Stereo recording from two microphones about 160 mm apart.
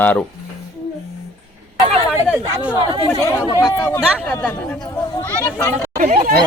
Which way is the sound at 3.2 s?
20° left (ahead or behind).